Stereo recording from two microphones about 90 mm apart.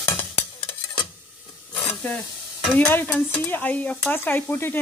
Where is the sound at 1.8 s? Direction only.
10° left (ahead or behind).